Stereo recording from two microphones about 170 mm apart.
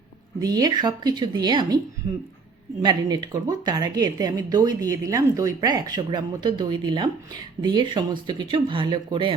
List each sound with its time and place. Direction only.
0.3 s speech: 25° right (ahead or behind)
2.8 s speech: 25° right (ahead or behind)